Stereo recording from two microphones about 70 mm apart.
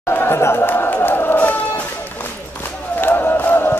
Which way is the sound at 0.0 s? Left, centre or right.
Left.